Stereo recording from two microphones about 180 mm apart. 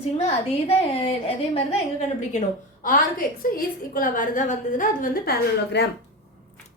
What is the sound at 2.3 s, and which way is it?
A woman's voice, 50° left (ahead or behind).